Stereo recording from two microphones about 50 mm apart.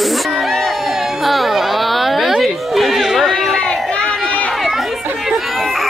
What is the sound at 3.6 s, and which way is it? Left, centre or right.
Crowd, centre.